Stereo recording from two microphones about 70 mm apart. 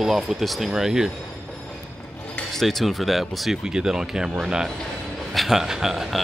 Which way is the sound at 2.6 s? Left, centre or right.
Centre.